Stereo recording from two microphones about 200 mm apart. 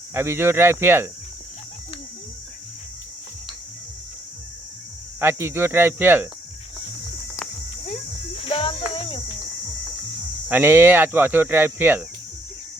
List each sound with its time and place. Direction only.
0.1 s speech: 10° right (ahead or behind)
5.2 s speech: 10° right (ahead or behind)
8.4 s music: 25° left (ahead or behind)
10.5 s speech: 10° right (ahead or behind)